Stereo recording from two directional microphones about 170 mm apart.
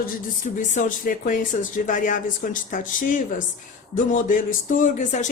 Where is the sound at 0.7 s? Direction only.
50° left (ahead or behind).